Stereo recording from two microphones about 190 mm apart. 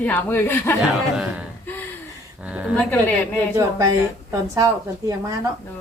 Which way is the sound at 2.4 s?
5° right (ahead or behind).